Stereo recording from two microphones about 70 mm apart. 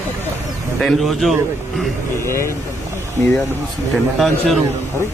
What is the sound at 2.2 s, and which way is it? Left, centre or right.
Speech, left.